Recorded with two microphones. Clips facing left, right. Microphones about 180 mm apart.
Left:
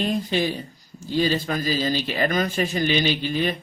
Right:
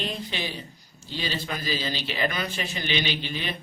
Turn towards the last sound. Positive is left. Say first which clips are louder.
# left 8 dB
turn(degrees=45)  # may be behind; listen again after turning